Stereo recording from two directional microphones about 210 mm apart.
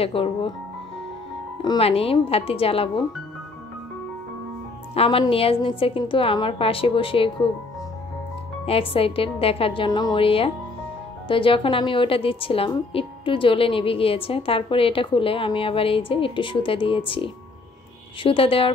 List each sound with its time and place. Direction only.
0.0 s a woman's voice: 25° left (ahead or behind)
1.6 s a woman's voice: 25° left (ahead or behind)
4.9 s a woman's voice: 25° left (ahead or behind)
8.6 s a woman's voice: 25° left (ahead or behind)